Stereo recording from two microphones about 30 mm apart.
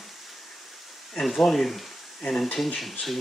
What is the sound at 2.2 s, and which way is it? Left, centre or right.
Speech, left.